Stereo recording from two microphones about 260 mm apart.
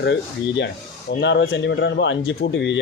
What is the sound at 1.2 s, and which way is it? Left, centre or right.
Speech, left.